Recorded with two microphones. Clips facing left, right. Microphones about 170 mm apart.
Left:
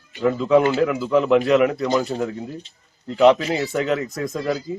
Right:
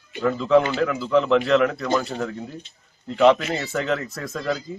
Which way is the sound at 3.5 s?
10° left (ahead or behind).